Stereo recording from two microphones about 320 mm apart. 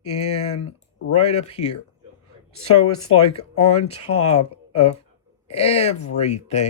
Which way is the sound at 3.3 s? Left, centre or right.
Centre.